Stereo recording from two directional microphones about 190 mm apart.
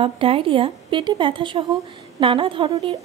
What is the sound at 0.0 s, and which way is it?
A woman's voice, 30° right (ahead or behind).